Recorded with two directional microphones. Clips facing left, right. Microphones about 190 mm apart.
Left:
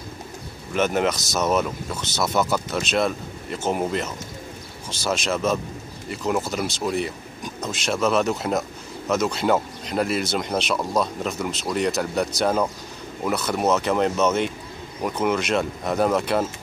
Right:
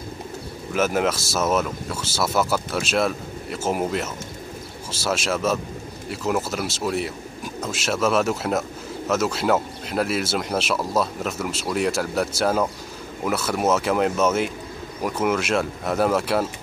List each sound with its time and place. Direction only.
0.7 s speech: 5° right (ahead or behind)